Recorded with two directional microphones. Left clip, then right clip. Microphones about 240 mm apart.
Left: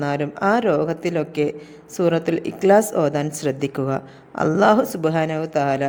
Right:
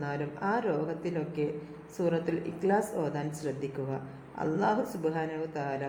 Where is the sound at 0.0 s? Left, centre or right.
Left.